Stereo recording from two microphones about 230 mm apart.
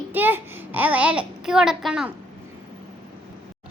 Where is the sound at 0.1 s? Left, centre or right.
Centre.